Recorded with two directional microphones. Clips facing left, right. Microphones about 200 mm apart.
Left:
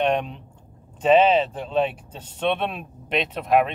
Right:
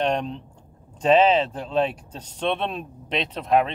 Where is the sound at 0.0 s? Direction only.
5° left (ahead or behind).